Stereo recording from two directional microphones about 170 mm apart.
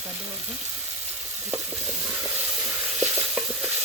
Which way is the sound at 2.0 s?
15° right (ahead or behind).